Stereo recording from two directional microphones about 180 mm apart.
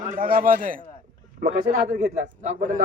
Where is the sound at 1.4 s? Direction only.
45° right (ahead or behind).